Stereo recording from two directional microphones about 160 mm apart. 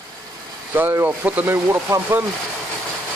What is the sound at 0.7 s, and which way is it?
Speech, 10° right (ahead or behind).